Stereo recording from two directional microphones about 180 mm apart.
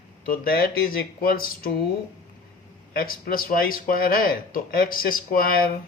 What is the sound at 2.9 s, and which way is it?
Speech, 55° left (ahead or behind).